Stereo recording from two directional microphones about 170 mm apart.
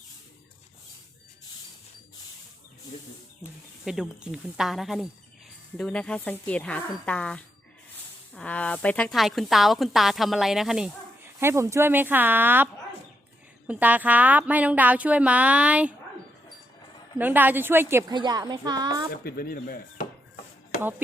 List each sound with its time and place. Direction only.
3.8 s a woman's voice: 5° right (ahead or behind)
11.3 s speech: 15° right (ahead or behind)
13.7 s speech: 10° right (ahead or behind)
17.2 s speech: 10° right (ahead or behind)
18.1 s a woman's voice: 25° right (ahead or behind)
19.1 s speech: 65° left (ahead or behind)